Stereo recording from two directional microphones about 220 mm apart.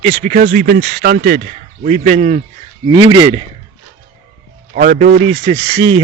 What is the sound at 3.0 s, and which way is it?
Speech, 20° right (ahead or behind).